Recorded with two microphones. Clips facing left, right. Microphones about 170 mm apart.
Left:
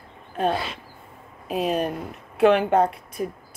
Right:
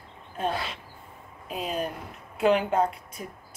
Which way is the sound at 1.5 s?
65° left (ahead or behind).